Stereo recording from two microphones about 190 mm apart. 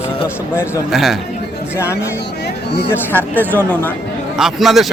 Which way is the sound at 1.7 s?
15° left (ahead or behind).